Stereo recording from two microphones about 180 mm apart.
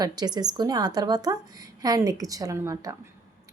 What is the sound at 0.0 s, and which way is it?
A woman's voice, 20° right (ahead or behind).